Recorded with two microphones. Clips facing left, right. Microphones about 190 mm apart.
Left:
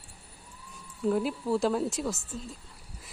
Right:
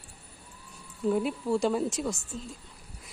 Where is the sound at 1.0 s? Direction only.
Centre (ahead or behind).